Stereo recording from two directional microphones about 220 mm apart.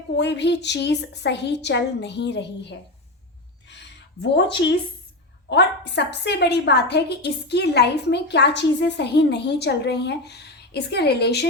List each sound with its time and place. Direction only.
0.2 s a woman's voice: 50° left (ahead or behind)
4.2 s a woman's voice: 50° left (ahead or behind)